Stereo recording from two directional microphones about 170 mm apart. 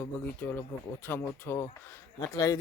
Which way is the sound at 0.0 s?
10° left (ahead or behind).